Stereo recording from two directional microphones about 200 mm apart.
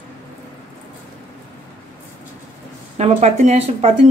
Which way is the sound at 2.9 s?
35° right (ahead or behind).